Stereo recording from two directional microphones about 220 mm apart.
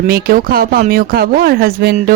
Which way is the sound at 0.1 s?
45° right (ahead or behind).